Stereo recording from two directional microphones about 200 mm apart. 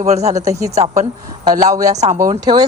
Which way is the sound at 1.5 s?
20° right (ahead or behind).